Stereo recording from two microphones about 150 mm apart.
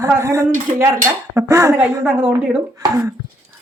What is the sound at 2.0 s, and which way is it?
Speech, 10° right (ahead or behind).